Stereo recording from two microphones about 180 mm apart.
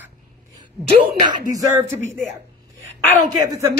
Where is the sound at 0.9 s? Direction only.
25° right (ahead or behind).